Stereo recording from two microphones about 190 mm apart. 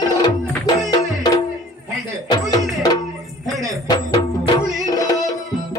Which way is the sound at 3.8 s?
20° left (ahead or behind).